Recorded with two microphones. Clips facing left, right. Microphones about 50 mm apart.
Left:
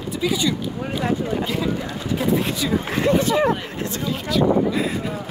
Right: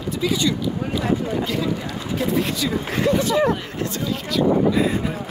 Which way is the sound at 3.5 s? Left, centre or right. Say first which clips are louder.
Even; centre.